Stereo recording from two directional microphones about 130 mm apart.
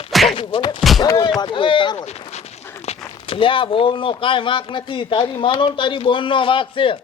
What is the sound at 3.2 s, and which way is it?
Speech, 45° left (ahead or behind).